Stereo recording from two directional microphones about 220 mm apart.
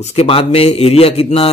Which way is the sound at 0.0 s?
25° left (ahead or behind).